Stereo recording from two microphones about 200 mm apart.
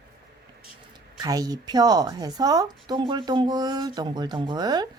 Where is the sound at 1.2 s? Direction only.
20° right (ahead or behind).